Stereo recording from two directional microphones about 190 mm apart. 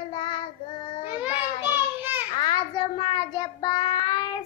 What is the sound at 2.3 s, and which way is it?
Child singing, 25° left (ahead or behind).